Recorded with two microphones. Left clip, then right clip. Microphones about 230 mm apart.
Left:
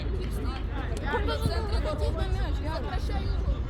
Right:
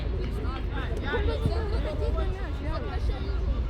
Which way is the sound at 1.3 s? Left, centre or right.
Left.